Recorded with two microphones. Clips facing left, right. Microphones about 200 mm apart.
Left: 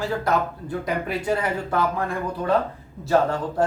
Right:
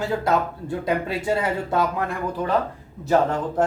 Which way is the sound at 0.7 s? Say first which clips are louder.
Right 2 dB; 25° right (ahead or behind).